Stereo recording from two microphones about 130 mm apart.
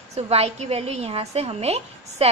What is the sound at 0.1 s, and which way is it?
A woman's voice, 55° right (ahead or behind).